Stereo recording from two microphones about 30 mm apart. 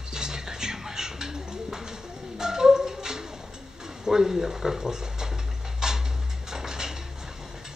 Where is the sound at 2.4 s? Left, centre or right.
Right.